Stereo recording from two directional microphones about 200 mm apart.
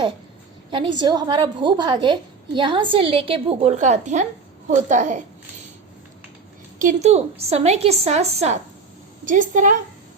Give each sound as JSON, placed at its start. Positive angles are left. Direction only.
{"t": 0.7, "sound": "a woman's voice", "side_deg": -25}
{"t": 6.7, "sound": "a woman's voice", "side_deg": -35}